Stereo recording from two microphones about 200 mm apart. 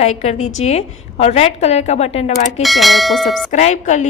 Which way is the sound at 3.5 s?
35° left (ahead or behind).